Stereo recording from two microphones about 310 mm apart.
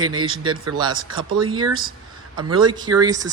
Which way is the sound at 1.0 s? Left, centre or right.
Right.